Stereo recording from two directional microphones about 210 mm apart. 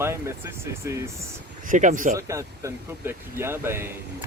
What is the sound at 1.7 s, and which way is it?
Speech, 35° right (ahead or behind).